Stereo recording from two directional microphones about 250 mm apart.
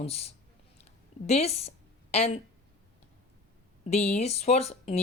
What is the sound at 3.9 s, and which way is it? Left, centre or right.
A woman's voice, left.